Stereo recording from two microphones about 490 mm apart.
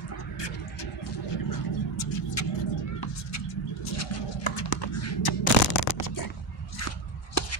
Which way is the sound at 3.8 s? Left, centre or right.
Left.